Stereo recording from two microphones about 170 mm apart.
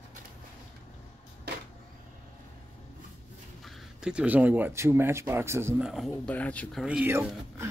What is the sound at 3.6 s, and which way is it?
Speech, 5° right (ahead or behind).